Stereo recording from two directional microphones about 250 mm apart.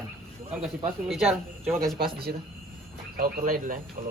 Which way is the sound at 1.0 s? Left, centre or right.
Centre.